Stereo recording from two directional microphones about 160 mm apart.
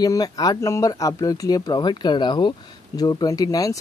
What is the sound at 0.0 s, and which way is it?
Speech, 25° left (ahead or behind).